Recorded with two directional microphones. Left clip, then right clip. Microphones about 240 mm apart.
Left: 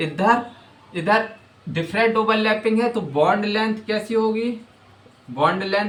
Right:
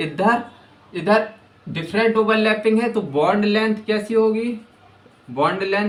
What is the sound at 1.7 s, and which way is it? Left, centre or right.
Speech, centre.